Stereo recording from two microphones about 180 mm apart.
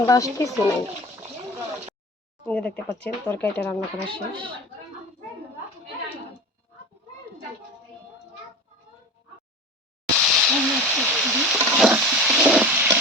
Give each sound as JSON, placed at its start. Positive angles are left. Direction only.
{"t": 0.0, "sound": "speech", "side_deg": 20}
{"t": 2.5, "sound": "speech", "side_deg": 5}
{"t": 4.0, "sound": "speech", "side_deg": -30}
{"t": 10.2, "sound": "a sound", "side_deg": -5}